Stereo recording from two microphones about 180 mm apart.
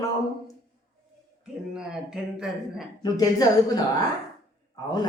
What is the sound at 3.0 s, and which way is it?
Speech, 20° left (ahead or behind).